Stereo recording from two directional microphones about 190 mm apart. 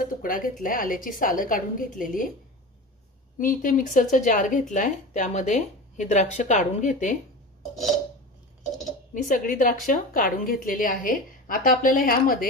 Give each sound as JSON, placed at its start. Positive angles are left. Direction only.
{"t": 0.0, "sound": "a woman's voice", "side_deg": 45}
{"t": 3.3, "sound": "a woman's voice", "side_deg": 45}
{"t": 9.1, "sound": "a woman's voice", "side_deg": 45}